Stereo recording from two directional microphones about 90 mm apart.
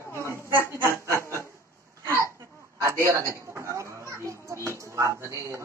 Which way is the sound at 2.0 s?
30° right (ahead or behind).